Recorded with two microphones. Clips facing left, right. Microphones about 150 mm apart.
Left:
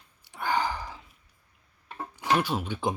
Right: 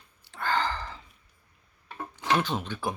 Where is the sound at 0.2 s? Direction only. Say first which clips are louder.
Left 1 dB; 15° left (ahead or behind).